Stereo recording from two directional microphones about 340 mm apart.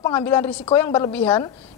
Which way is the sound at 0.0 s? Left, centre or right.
Centre.